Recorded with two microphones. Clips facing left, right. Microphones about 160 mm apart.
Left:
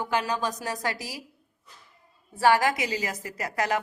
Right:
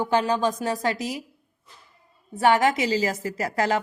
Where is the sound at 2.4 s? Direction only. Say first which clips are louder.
Right 2 dB; 20° right (ahead or behind).